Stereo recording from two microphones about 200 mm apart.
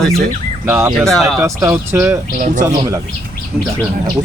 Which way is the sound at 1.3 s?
15° right (ahead or behind).